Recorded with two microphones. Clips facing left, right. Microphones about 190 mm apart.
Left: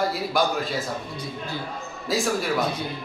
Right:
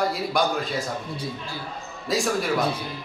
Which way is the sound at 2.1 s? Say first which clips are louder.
Even; centre (ahead or behind).